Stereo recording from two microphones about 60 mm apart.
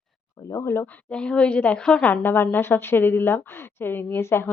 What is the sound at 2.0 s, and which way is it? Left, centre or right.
A woman's voice, left.